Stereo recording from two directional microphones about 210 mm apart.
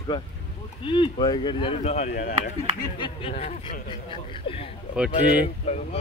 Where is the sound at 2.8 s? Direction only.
20° left (ahead or behind).